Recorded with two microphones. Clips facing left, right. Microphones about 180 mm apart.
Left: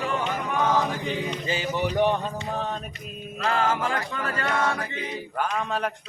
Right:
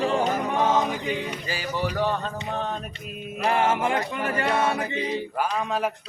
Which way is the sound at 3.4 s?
20° right (ahead or behind).